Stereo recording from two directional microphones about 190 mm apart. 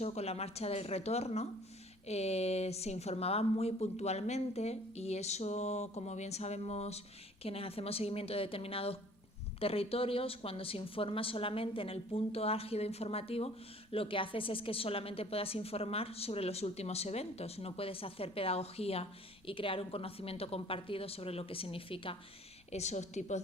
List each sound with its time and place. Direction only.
0.0 s a woman's voice: 35° left (ahead or behind)